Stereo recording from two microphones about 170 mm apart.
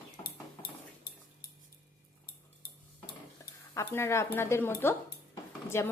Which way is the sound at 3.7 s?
15° left (ahead or behind).